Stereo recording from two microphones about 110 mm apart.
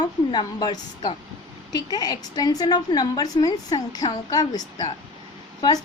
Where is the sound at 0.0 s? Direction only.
40° left (ahead or behind).